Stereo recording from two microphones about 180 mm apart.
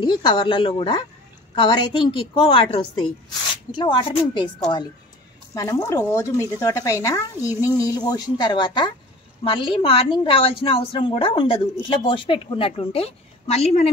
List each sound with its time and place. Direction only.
0.0 s a woman's voice: 25° left (ahead or behind)
5.5 s a woman's voice: 20° left (ahead or behind); by 13.8 s 35° left (ahead or behind)